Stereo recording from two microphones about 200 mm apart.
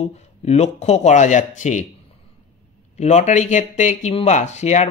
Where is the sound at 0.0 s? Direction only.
35° left (ahead or behind).